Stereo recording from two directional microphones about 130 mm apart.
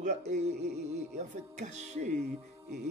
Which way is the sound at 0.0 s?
65° right (ahead or behind).